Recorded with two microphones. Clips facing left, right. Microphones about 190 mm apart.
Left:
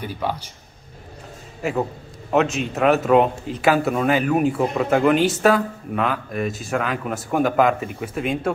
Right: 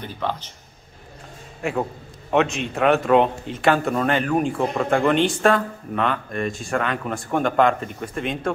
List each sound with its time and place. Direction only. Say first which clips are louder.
0.0 s speech: left 1 dB; 10° left (ahead or behind)
1.6 s a man's voice: left 1 dB; centre (ahead or behind)